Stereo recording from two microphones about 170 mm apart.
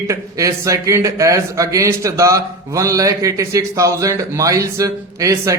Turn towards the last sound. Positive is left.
turn(degrees=-20)  # may be behind; listen again after turning